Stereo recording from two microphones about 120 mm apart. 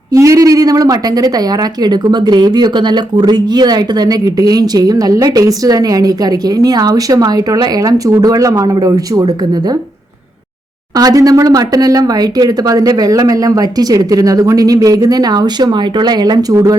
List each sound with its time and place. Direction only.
0.1 s speech: 30° right (ahead or behind)
10.9 s speech: 30° right (ahead or behind)